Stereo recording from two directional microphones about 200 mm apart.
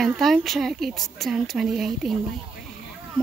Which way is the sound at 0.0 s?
Centre (ahead or behind).